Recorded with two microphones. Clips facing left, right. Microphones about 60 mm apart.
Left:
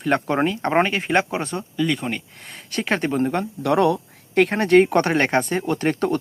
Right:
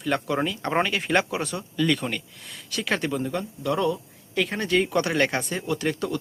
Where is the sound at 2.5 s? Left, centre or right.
Left.